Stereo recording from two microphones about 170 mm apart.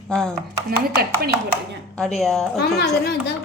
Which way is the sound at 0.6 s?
65° right (ahead or behind).